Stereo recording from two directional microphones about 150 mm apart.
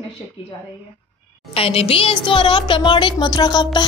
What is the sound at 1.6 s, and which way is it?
A woman's voice, 40° left (ahead or behind).